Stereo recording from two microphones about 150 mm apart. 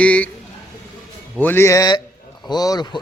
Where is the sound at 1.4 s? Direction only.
15° left (ahead or behind).